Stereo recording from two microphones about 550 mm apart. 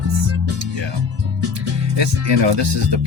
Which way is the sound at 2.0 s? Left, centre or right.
Right.